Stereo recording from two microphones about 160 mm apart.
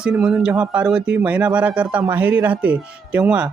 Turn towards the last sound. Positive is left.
turn(degrees=-10)  # may be behind; listen again after turning